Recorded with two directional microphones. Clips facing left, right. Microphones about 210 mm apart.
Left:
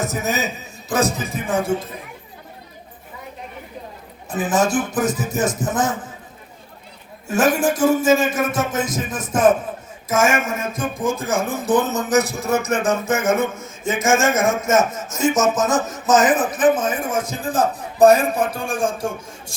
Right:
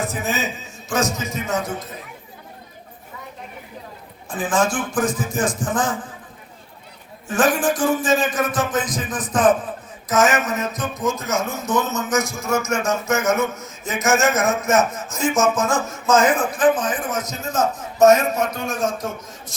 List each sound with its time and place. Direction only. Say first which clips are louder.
0.0 s music: left 2 dB; 40° left (ahead or behind)
4.3 s a man's voice: left 2 dB; 20° left (ahead or behind)
7.3 s a man's voice: left 1 dB; 25° left (ahead or behind)
10.1 s music: even; 25° left (ahead or behind)
14.0 s a man's voice: left 1 dB; 25° left (ahead or behind)